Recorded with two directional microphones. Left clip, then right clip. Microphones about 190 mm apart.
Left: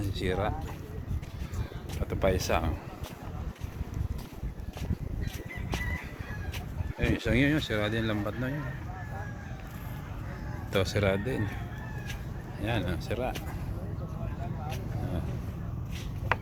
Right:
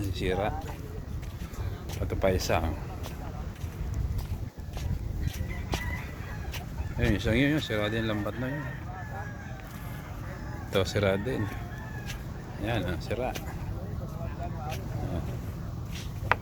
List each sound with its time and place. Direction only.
0.0 s speech: 20° right (ahead or behind)
2.0 s speech: 15° right (ahead or behind)
5.7 s music: 5° right (ahead or behind)
7.0 s speech: 25° right (ahead or behind); by 8.5 s 10° right (ahead or behind)
10.7 s speech: 20° right (ahead or behind)
12.6 s speech: 15° right (ahead or behind)